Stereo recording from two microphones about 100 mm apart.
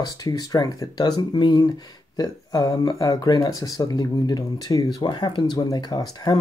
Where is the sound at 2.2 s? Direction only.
40° left (ahead or behind).